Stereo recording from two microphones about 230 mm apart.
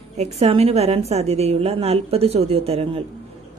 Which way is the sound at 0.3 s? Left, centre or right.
Right.